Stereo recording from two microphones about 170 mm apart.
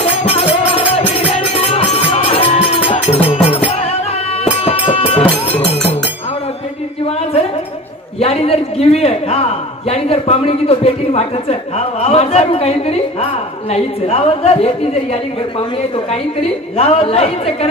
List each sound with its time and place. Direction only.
0.0 s music: 40° left (ahead or behind)
8.2 s a man's voice: 35° left (ahead or behind)
16.7 s a man's voice: 35° left (ahead or behind)